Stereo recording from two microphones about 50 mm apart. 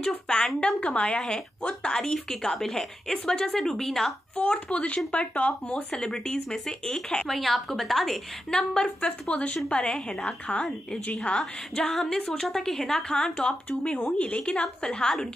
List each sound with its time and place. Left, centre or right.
0.6 s a woman's voice: left; by 4.1 s centre
4.4 s a woman's voice: left
5.9 s a woman's voice: centre
7.2 s a woman's voice: centre
8.5 s a woman's voice: centre
12.0 s a woman's voice: centre
13.7 s a woman's voice: left